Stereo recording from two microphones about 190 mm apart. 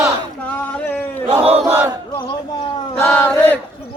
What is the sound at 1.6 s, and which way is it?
Battle cry, 15° right (ahead or behind).